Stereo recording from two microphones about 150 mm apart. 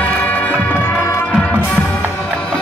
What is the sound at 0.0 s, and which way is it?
Music, 10° left (ahead or behind).